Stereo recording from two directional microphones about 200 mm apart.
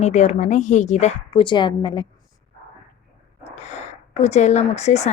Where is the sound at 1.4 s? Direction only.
25° left (ahead or behind).